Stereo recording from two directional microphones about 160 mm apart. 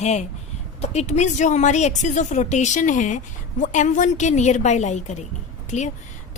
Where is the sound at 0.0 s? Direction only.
45° left (ahead or behind).